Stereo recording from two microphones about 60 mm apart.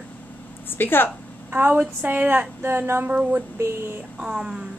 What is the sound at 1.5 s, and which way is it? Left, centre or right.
Speech, right.